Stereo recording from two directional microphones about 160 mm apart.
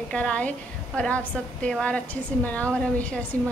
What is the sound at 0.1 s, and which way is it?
A woman's voice, 5° left (ahead or behind).